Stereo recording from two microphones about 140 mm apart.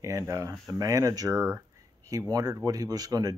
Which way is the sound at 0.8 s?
25° right (ahead or behind).